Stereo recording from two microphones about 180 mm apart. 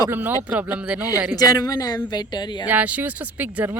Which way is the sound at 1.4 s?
20° left (ahead or behind).